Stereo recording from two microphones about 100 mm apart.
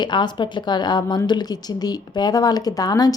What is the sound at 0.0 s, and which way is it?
A woman's voice, 50° left (ahead or behind).